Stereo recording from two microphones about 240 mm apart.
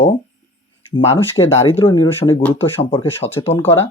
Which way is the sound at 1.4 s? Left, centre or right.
Left.